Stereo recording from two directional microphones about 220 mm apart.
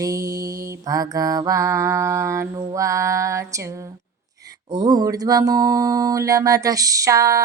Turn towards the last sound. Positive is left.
turn(degrees=-15)  # may be behind; listen again after turning